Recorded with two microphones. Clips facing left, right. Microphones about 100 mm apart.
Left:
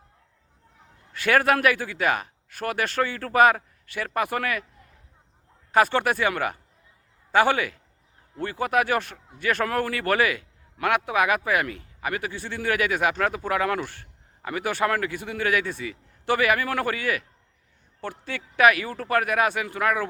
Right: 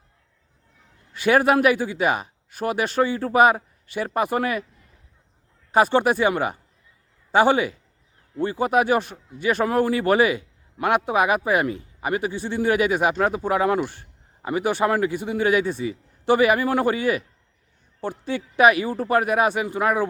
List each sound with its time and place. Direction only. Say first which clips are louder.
1.1 s a man's voice: right 3 dB; 20° right (ahead or behind)
5.7 s a man's voice: right 3 dB; 20° right (ahead or behind)